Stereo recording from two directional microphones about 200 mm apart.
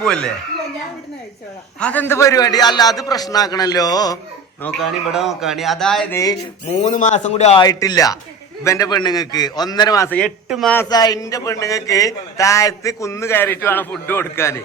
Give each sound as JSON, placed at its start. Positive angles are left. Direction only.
{"t": 0.0, "sound": "a man's voice", "side_deg": 5}
{"t": 1.8, "sound": "a man's voice", "side_deg": 10}
{"t": 4.6, "sound": "a man's voice", "side_deg": 0}
{"t": 6.7, "sound": "a man's voice", "side_deg": 35}
{"t": 7.6, "sound": "a man's voice", "side_deg": 20}
{"t": 10.2, "sound": "a man's voice", "side_deg": 0}
{"t": 10.8, "sound": "a man's voice", "side_deg": 20}